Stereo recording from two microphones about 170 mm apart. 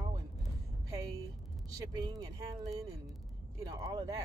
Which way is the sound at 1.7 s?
20° right (ahead or behind).